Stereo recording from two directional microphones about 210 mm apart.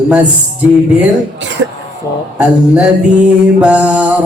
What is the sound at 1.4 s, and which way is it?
Speech, 60° right (ahead or behind).